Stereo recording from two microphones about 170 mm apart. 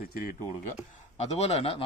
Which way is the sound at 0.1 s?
60° left (ahead or behind).